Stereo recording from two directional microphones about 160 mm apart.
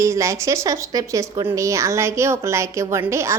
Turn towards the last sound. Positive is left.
turn(degrees=-15)  # may be behind; listen again after turning